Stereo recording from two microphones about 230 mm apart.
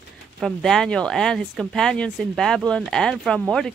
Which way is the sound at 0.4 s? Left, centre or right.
Centre.